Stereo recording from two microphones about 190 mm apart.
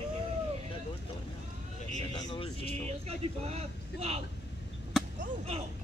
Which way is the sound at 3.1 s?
30° right (ahead or behind).